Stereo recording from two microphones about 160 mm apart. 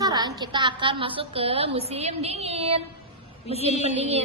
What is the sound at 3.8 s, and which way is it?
Music, 40° right (ahead or behind).